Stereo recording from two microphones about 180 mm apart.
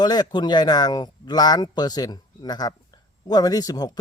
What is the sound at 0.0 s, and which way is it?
Speech, 20° left (ahead or behind).